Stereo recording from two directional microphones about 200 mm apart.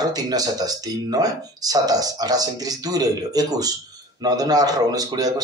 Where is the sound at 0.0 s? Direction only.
20° right (ahead or behind).